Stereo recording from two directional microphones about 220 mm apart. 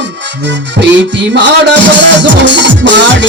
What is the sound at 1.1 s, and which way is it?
Music, 55° right (ahead or behind).